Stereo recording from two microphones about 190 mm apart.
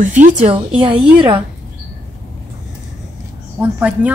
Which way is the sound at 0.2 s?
40° right (ahead or behind).